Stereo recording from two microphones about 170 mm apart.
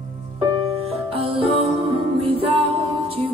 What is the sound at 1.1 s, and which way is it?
Music, 30° right (ahead or behind).